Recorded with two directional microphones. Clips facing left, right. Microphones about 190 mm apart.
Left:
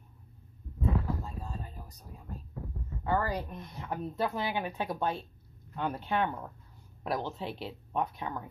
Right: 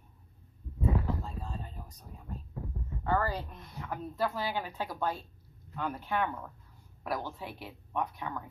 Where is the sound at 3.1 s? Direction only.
15° left (ahead or behind).